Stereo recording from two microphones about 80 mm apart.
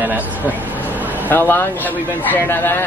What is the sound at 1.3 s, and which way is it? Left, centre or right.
Speech, left.